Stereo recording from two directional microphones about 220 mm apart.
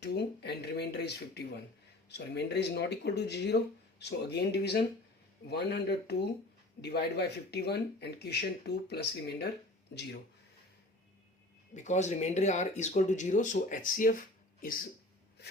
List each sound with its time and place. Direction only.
0.0 s speech: 50° left (ahead or behind)
11.7 s speech: 30° left (ahead or behind)